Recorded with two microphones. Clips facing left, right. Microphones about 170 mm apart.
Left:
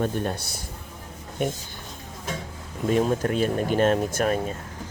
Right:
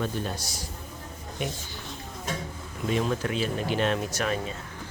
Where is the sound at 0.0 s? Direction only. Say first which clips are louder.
Left 4 dB; 55° left (ahead or behind).